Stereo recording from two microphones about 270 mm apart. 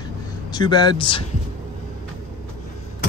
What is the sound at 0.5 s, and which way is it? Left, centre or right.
Speech, centre.